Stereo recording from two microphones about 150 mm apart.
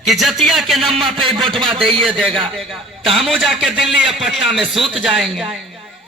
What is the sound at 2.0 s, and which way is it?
A man's voice, centre (ahead or behind).